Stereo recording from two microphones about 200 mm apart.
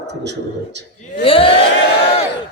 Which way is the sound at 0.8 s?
60° right (ahead or behind).